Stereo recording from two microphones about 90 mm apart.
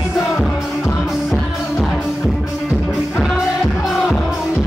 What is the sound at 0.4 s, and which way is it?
Music, 5° right (ahead or behind).